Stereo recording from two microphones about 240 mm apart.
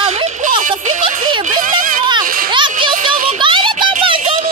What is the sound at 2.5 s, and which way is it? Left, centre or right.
Splash, centre.